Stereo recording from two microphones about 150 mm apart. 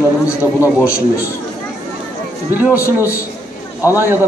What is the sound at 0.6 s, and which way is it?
Speech, 20° left (ahead or behind).